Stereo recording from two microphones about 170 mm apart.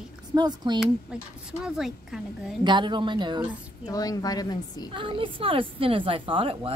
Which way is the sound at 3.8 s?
20° left (ahead or behind).